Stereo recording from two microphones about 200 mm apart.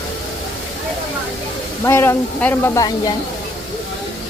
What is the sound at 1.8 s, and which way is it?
Speech, 15° left (ahead or behind).